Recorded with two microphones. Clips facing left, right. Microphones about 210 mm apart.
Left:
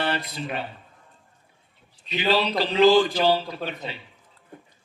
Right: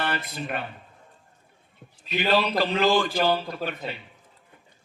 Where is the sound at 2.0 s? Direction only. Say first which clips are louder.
Even; 50° right (ahead or behind).